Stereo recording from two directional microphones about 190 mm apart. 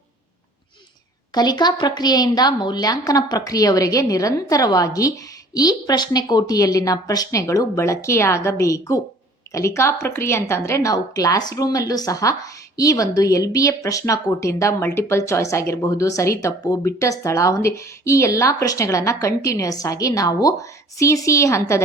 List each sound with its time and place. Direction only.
1.3 s a woman's voice: 20° left (ahead or behind)